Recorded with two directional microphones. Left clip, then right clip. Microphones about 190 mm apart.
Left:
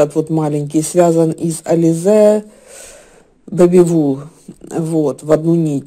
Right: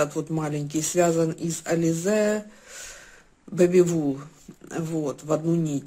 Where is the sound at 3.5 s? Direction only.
30° left (ahead or behind).